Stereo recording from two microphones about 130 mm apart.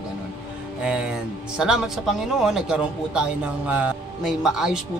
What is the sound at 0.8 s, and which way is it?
A woman's voice, 5° right (ahead or behind).